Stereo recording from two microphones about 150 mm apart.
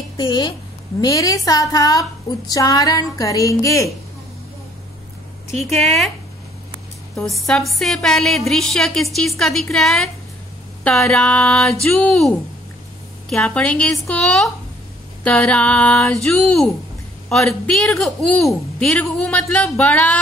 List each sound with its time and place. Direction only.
0.2 s a woman's voice: 30° left (ahead or behind)
5.6 s a woman's voice: centre (ahead or behind)
7.2 s a woman's voice: centre (ahead or behind)